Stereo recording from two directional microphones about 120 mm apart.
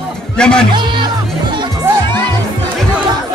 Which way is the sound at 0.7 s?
40° right (ahead or behind).